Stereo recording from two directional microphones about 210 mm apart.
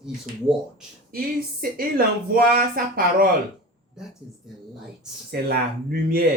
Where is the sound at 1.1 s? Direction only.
45° right (ahead or behind).